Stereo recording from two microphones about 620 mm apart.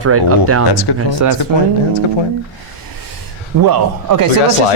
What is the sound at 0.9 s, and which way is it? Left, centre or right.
Speech, left.